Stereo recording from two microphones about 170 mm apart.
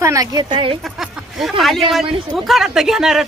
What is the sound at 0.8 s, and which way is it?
Speech, centre (ahead or behind).